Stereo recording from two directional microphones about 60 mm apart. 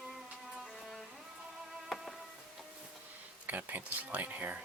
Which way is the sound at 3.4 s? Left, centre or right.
Right.